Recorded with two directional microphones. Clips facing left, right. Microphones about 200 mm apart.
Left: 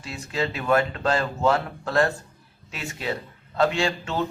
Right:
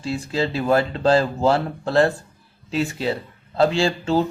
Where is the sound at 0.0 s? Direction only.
30° right (ahead or behind).